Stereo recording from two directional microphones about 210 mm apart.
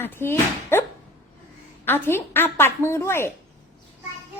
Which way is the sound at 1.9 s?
10° left (ahead or behind).